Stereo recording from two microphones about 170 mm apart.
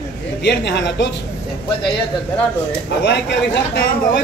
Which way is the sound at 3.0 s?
90° left.